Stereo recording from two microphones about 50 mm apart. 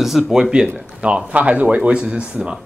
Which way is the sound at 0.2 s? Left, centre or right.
Centre.